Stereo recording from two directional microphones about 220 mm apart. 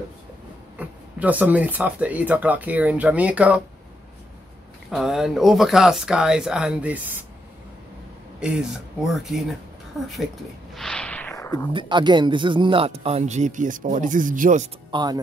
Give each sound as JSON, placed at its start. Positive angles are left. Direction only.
{"t": 0.7, "sound": "speech", "side_deg": -5}
{"t": 4.9, "sound": "speech", "side_deg": 0}
{"t": 8.4, "sound": "speech", "side_deg": -5}
{"t": 10.7, "sound": "a sound", "side_deg": 5}
{"t": 11.7, "sound": "speech", "side_deg": -20}
{"t": 14.9, "sound": "speech", "side_deg": -20}